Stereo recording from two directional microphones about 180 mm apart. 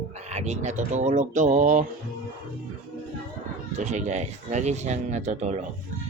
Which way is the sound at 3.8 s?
40° right (ahead or behind).